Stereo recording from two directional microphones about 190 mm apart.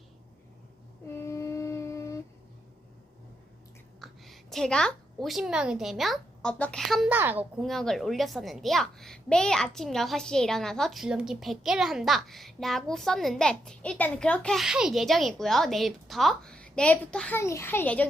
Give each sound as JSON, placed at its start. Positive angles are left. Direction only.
{"t": 1.0, "sound": "a sound", "side_deg": 15}
{"t": 4.0, "sound": "a woman's voice", "side_deg": 0}
{"t": 7.6, "sound": "a child's voice", "side_deg": 0}